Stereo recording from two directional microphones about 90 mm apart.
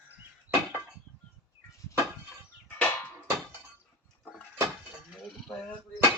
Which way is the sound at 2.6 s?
20° left (ahead or behind).